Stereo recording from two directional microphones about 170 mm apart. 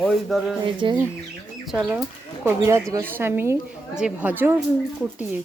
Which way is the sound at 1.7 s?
5° right (ahead or behind).